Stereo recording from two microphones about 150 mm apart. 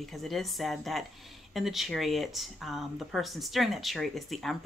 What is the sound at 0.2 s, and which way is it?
Speech, centre (ahead or behind).